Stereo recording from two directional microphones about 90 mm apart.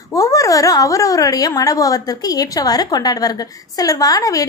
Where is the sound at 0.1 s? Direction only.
40° left (ahead or behind).